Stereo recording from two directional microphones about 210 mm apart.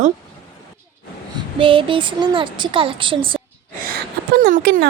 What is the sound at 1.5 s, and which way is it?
Speech, 25° right (ahead or behind).